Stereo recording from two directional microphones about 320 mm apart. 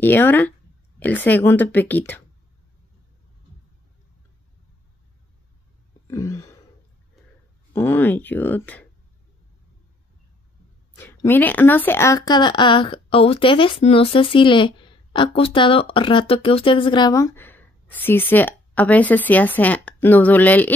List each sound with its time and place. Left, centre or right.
0.0 s speech: centre
6.0 s a sound: centre
7.7 s speech: centre
11.0 s speech: centre